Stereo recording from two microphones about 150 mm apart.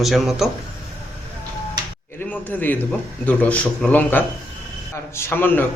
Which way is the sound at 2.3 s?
10° left (ahead or behind).